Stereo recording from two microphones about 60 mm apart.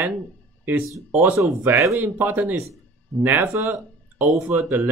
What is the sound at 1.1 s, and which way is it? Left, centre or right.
Speech, right.